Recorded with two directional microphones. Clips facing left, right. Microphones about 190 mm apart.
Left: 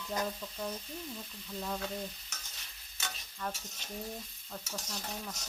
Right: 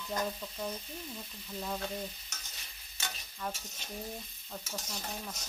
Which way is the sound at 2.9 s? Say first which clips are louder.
Even; 5° right (ahead or behind).